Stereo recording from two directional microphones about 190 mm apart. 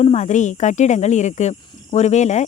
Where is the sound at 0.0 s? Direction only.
35° left (ahead or behind).